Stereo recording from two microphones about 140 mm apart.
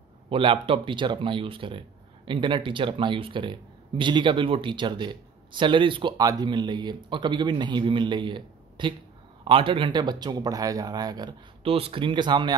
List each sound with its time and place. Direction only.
0.3 s a man's voice: 40° right (ahead or behind)
11.6 s speech: 45° right (ahead or behind)